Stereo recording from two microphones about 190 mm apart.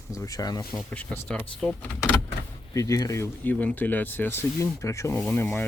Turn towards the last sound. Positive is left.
turn(degrees=10)  # may be behind; listen again after turning